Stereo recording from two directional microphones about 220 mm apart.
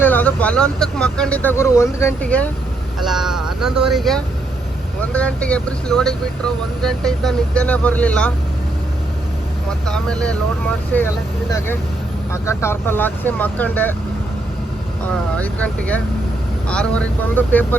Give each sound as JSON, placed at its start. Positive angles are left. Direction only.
{"t": 0.0, "sound": "speech", "side_deg": 10}
{"t": 9.8, "sound": "speech", "side_deg": 5}
{"t": 12.3, "sound": "speech", "side_deg": 10}
{"t": 15.4, "sound": "speech", "side_deg": 5}